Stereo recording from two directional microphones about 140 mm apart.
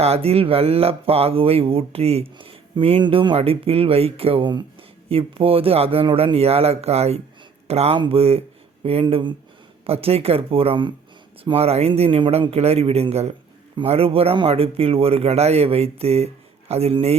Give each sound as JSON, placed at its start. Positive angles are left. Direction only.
{"t": 0.0, "sound": "speech", "side_deg": -45}